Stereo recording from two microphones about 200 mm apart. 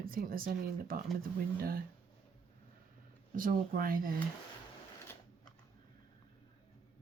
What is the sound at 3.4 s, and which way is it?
Speech, 45° right (ahead or behind).